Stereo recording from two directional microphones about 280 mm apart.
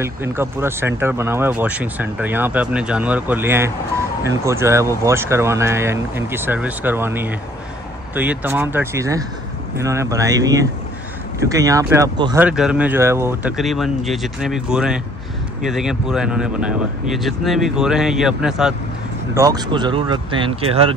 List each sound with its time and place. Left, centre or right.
0.0 s speech: centre
19.3 s speech: centre